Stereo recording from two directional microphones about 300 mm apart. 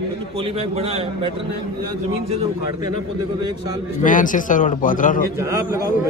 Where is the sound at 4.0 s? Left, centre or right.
Left.